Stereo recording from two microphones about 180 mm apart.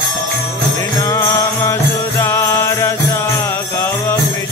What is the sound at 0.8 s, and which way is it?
Music, 15° left (ahead or behind).